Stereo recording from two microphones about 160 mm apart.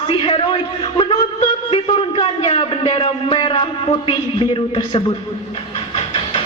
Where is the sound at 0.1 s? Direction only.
35° left (ahead or behind).